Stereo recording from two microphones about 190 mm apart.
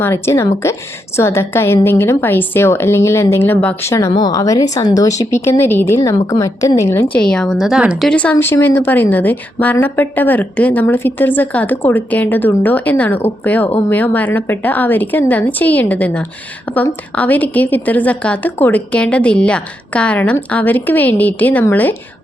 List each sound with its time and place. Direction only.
0.0 s a woman's voice: 15° left (ahead or behind); by 8.1 s 5° right (ahead or behind)
8.1 s a woman's voice: 10° left (ahead or behind)